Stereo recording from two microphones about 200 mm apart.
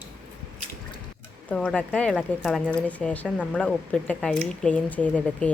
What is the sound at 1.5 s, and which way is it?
Speech, 5° left (ahead or behind).